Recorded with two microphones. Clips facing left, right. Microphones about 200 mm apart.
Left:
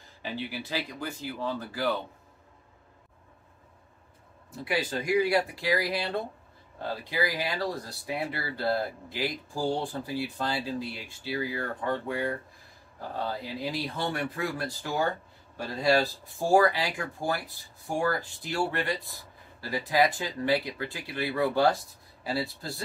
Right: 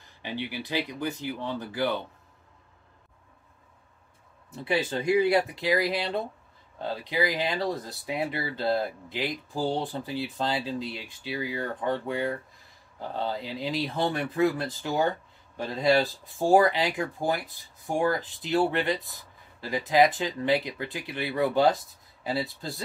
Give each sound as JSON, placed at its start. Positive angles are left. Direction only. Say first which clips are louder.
{"t": 0.2, "sound": "speech", "louder": "right 1 dB", "side_deg": -15}
{"t": 4.6, "sound": "speech", "louder": "right 3 dB", "side_deg": -25}